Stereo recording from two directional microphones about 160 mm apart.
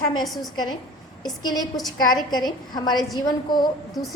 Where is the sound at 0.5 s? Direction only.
25° left (ahead or behind).